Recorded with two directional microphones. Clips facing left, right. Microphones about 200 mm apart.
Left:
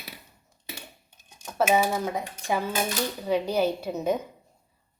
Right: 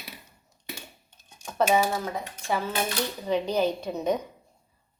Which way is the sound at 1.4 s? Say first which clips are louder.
Even; 5° left (ahead or behind).